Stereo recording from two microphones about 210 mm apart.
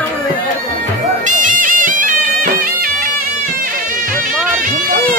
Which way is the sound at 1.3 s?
40° right (ahead or behind).